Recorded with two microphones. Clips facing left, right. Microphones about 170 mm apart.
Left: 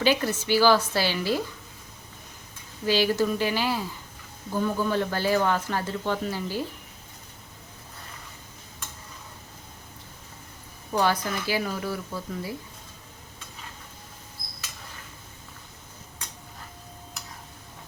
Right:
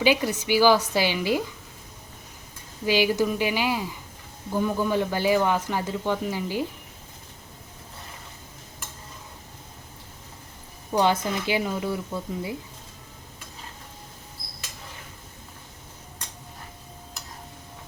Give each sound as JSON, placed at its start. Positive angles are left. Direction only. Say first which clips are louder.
{"t": 0.0, "sound": "speech", "louder": "right 1 dB", "side_deg": -10}
{"t": 2.8, "sound": "speech", "louder": "right 1 dB", "side_deg": -15}
{"t": 10.9, "sound": "speech", "louder": "right 2 dB", "side_deg": -20}